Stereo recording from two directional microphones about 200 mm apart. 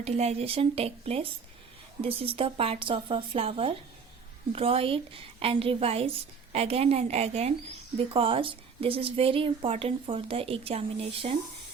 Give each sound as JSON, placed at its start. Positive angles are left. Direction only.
{"t": 0.0, "sound": "a woman's voice", "side_deg": -30}